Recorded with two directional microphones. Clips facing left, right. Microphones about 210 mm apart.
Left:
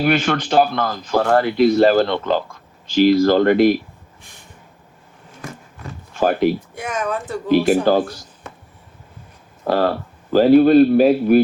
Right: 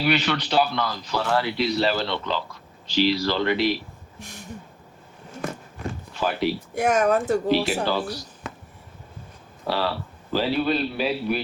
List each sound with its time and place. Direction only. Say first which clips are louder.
0.0 s speech: left 5 dB; 50° left (ahead or behind)
4.2 s a sound: right 7 dB; 75° right (ahead or behind)
6.1 s speech: left 8 dB; 50° left (ahead or behind)
6.7 s speech: right 4 dB; 45° right (ahead or behind)
7.4 s speech: left 7 dB; 50° left (ahead or behind)
9.6 s speech: left 8 dB; 50° left (ahead or behind)